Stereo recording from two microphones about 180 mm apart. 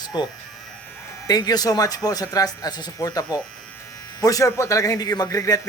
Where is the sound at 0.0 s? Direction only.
25° left (ahead or behind).